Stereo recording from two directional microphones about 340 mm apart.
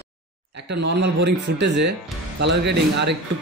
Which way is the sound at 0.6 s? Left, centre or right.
Right.